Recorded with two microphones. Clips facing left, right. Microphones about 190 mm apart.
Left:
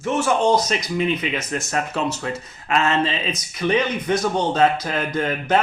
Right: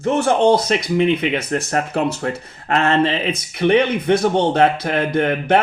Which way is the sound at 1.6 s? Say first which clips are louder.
Right 4 dB; 60° right (ahead or behind).